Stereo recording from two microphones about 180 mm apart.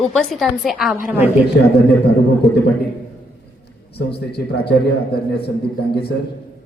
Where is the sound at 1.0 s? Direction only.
10° right (ahead or behind).